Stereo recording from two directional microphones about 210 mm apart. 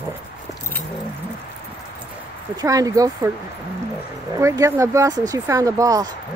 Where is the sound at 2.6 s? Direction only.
15° right (ahead or behind).